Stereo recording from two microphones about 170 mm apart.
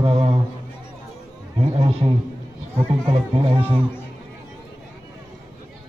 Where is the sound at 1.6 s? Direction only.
30° right (ahead or behind).